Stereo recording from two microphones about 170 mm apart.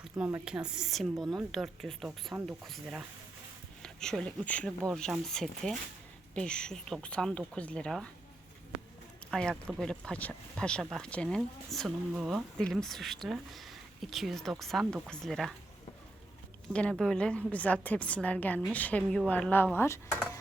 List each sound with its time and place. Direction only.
0.2 s speech: 15° right (ahead or behind)
0.4 s speech: 5° right (ahead or behind)
9.3 s speech: 5° left (ahead or behind)
16.7 s a woman's voice: 5° left (ahead or behind)